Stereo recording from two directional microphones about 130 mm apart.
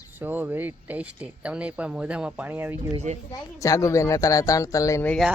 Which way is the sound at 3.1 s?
65° right (ahead or behind).